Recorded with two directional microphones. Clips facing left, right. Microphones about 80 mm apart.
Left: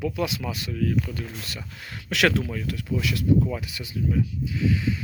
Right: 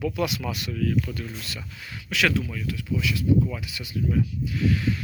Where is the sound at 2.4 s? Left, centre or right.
Left.